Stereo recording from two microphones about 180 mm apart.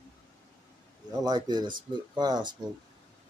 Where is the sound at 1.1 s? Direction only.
20° right (ahead or behind).